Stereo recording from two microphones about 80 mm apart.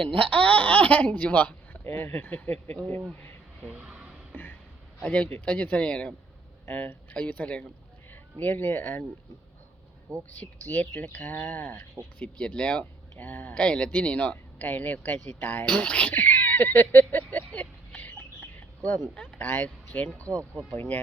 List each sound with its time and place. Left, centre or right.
0.2 s speech: centre
1.8 s speech: left
3.7 s a sound: centre
5.0 s speech: centre
6.7 s speech: left
10.1 s speech: right
10.4 s speech: left
13.5 s speech: centre; by 17.4 s left
17.5 s a sound: centre
19.1 s speech: centre